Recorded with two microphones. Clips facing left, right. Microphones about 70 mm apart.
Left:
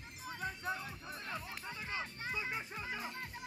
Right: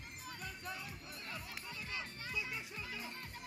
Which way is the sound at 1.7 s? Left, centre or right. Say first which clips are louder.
Left 4 dB; left.